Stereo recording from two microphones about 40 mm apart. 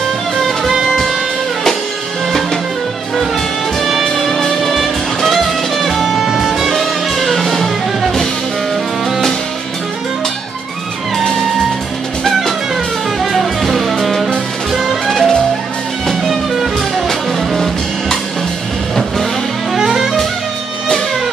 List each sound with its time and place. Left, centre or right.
3.8 s music: centre
4.4 s music: centre
6.7 s music: centre
13.2 s music: centre
14.7 s music: centre
15.0 s music: centre
19.8 s music: centre